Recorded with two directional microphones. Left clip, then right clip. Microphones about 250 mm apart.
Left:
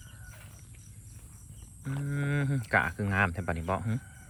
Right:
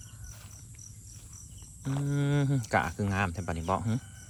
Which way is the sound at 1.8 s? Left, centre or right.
Centre.